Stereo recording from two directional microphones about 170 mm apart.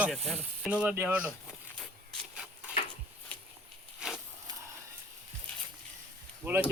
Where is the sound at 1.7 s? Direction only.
5° left (ahead or behind).